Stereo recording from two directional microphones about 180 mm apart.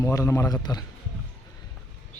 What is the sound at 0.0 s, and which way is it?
Speech, 15° left (ahead or behind).